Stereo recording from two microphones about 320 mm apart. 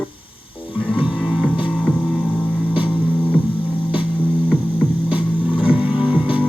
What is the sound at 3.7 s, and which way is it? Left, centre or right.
Mains hum, centre.